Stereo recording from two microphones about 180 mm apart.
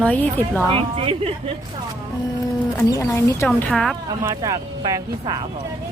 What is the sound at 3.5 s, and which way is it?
Speech, 5° left (ahead or behind).